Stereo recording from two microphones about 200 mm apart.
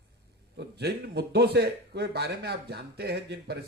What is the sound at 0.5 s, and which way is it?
A man's voice, 55° right (ahead or behind).